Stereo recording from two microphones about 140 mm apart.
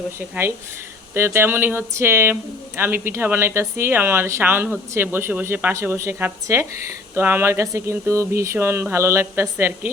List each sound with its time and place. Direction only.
0.2 s speech: 15° right (ahead or behind)